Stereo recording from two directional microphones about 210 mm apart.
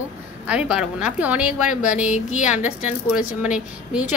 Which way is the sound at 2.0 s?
35° left (ahead or behind).